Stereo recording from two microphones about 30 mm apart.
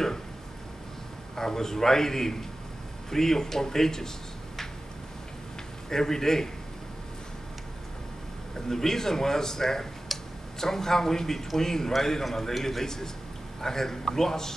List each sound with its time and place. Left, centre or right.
1.3 s a man's voice: centre
5.9 s a man's voice: centre
8.5 s a man's voice: centre
10.1 s tick-tock: centre
10.6 s a man's voice: centre